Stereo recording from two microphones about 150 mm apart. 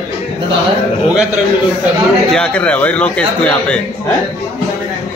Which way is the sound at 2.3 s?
10° left (ahead or behind).